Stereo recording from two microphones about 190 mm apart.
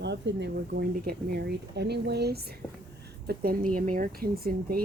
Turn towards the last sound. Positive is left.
turn(degrees=-50)  # may be behind; listen again after turning